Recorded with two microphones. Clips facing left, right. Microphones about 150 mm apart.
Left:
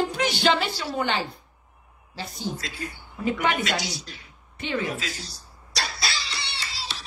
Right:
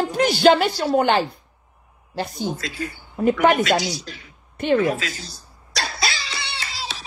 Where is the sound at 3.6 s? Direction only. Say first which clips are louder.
Right 8 dB; 90° right.